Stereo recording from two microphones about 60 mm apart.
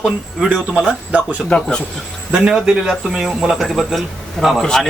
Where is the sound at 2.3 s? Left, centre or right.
Centre.